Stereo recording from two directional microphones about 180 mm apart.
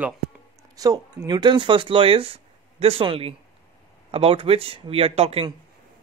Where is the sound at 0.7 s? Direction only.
20° right (ahead or behind).